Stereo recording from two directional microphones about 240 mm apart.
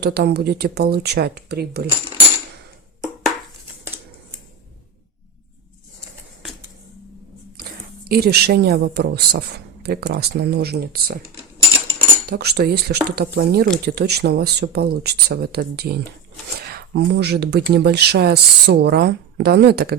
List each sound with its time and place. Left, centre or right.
0.0 s speech: right
7.5 s speech: right
12.3 s speech: right